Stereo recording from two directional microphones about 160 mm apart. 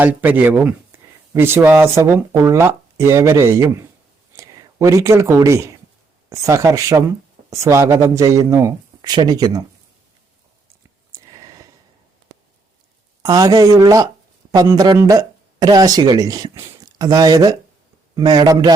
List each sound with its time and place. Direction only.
0.0 s speech: 10° right (ahead or behind)
11.1 s a sound: 20° right (ahead or behind)
13.2 s speech: 25° right (ahead or behind)